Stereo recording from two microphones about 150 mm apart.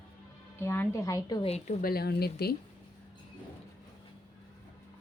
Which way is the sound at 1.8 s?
90° left.